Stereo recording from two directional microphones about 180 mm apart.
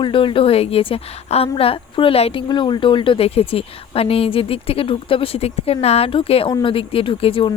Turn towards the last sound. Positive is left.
turn(degrees=30)  # may be behind; listen again after turning